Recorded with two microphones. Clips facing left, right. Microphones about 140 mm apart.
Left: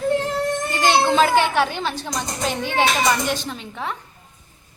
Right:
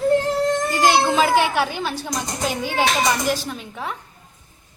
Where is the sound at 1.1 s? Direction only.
5° right (ahead or behind).